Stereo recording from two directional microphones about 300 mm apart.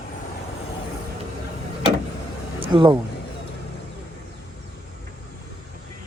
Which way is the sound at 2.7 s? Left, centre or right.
Centre.